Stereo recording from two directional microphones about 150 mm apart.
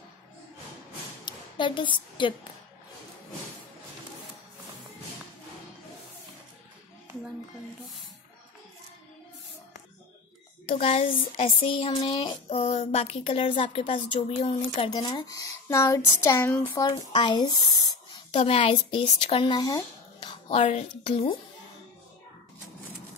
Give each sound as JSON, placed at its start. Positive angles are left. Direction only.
{"t": 1.2, "sound": "a sound", "side_deg": 30}
{"t": 10.7, "sound": "speech", "side_deg": 45}
{"t": 14.8, "sound": "speech", "side_deg": 25}
{"t": 17.2, "sound": "speech", "side_deg": 30}
{"t": 18.3, "sound": "speech", "side_deg": 40}